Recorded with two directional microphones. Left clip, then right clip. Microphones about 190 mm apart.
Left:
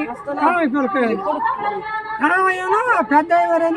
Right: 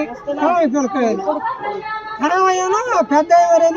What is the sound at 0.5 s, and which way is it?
Speech, 35° right (ahead or behind).